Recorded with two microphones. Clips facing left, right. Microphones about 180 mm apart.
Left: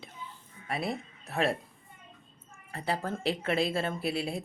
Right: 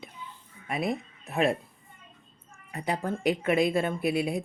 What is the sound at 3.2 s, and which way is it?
Speech, 35° left (ahead or behind).